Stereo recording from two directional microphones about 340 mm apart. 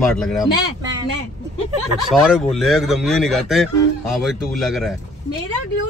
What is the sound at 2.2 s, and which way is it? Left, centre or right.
Speech, centre.